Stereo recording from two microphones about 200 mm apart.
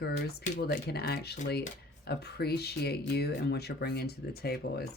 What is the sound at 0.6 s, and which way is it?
Speech, 55° left (ahead or behind).